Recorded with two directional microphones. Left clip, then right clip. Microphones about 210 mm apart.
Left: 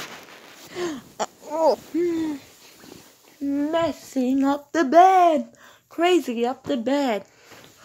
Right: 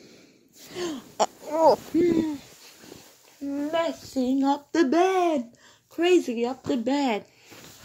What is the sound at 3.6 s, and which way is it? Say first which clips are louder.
Speech: left 3 dB; 30° left (ahead or behind).